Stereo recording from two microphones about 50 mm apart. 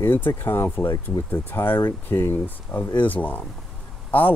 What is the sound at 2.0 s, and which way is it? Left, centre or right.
Speech, left.